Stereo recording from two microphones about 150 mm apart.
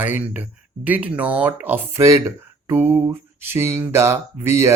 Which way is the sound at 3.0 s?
15° right (ahead or behind).